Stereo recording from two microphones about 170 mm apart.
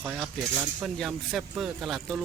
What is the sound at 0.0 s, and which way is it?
Speech, centre (ahead or behind).